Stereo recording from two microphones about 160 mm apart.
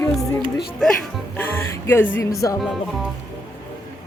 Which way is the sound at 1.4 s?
15° left (ahead or behind).